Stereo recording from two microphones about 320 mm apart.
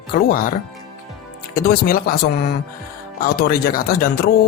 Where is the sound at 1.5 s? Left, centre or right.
Left.